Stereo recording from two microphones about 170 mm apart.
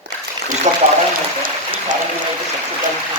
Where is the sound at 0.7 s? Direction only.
40° right (ahead or behind).